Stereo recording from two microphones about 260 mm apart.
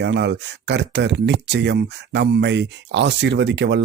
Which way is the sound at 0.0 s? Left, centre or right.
Right.